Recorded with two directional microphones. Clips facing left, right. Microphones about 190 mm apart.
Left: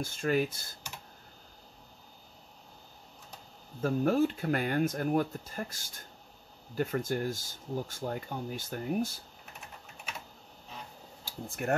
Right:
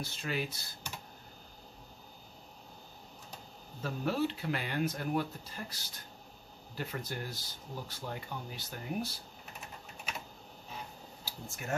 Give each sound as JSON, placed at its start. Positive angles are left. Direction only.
{"t": 0.0, "sound": "speech", "side_deg": 50}
{"t": 3.8, "sound": "speech", "side_deg": 50}
{"t": 11.2, "sound": "speech", "side_deg": 55}